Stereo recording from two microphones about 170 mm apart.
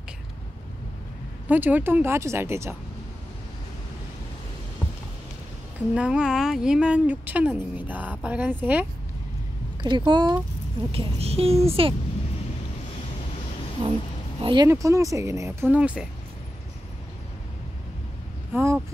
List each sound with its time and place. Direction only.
1.5 s speech: 10° right (ahead or behind)
5.9 s speech: 5° right (ahead or behind)
9.8 s speech: 25° right (ahead or behind)
10.9 s speech: 35° right (ahead or behind)
14.4 s speech: 25° right (ahead or behind); by 16.1 s 5° right (ahead or behind)
18.5 s speech: 15° right (ahead or behind)